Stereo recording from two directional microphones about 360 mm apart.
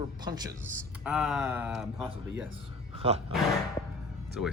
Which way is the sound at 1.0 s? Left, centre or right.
Centre.